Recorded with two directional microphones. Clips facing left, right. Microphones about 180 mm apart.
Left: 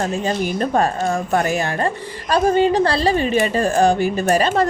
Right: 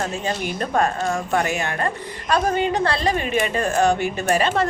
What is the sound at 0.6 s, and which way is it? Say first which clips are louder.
A woman's voice: left 1 dB; 35° left (ahead or behind).